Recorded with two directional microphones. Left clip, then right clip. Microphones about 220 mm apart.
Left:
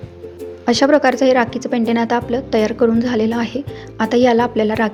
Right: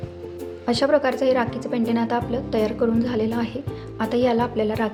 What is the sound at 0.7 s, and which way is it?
A woman's voice, 30° left (ahead or behind).